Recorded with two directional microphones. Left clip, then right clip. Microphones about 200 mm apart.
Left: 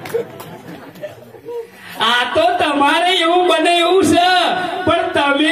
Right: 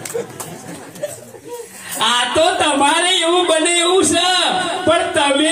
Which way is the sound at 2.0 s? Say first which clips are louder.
Even; 40° left (ahead or behind).